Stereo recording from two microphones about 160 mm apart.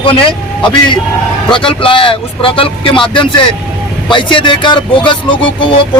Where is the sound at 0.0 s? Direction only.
35° left (ahead or behind).